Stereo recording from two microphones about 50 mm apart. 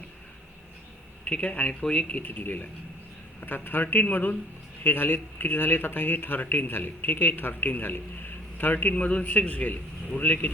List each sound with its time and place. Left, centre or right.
1.2 s speech: left
2.2 s speech: left